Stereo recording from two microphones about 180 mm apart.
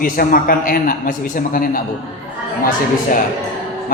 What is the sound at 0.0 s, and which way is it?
A man's voice, 50° left (ahead or behind).